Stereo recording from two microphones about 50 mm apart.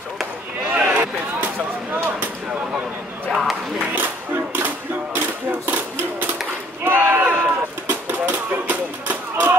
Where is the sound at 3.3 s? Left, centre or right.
Centre.